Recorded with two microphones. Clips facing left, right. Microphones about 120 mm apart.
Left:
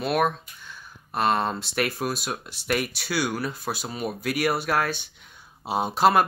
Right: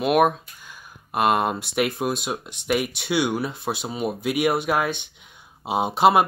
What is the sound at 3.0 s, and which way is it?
Speech, 20° right (ahead or behind).